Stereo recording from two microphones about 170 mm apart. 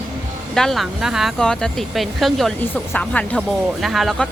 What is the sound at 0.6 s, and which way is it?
Speech, centre (ahead or behind).